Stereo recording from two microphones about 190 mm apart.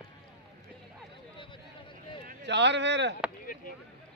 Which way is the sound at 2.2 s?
65° right (ahead or behind).